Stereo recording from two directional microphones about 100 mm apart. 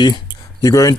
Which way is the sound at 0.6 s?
35° left (ahead or behind).